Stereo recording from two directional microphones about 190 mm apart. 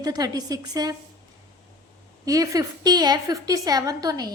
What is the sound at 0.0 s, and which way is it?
Speech, 20° right (ahead or behind).